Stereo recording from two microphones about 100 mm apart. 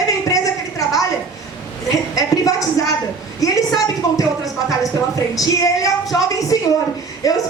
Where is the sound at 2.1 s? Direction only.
35° left (ahead or behind).